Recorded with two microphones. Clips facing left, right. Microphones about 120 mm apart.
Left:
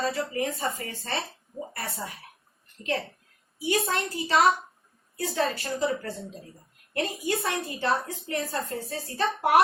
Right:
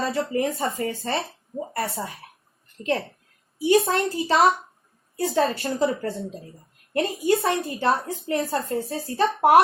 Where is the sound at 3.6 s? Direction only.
25° right (ahead or behind).